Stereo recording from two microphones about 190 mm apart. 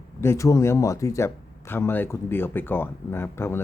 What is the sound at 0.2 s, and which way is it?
Speech, 15° left (ahead or behind).